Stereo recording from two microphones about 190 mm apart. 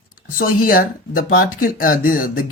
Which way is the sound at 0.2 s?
50° left (ahead or behind).